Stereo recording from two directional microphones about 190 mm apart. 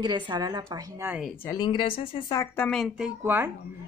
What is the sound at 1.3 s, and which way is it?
Speech, 20° left (ahead or behind).